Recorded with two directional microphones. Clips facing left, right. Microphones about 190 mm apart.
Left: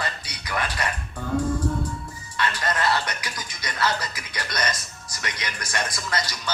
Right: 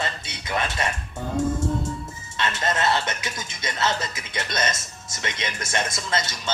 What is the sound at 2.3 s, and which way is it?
A man's voice, 25° right (ahead or behind).